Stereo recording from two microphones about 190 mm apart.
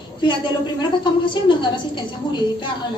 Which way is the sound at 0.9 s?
25° left (ahead or behind).